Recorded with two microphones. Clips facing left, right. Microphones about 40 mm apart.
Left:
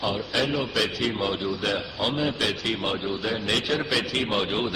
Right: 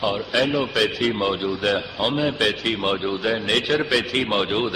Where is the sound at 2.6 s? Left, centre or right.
Right.